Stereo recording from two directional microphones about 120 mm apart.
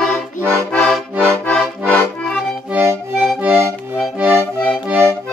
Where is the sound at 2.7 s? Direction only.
20° right (ahead or behind).